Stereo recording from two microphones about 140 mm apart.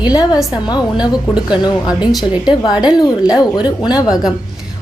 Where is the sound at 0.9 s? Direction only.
5° right (ahead or behind).